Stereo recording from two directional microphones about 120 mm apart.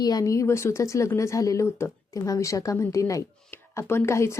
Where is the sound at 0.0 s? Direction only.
30° left (ahead or behind).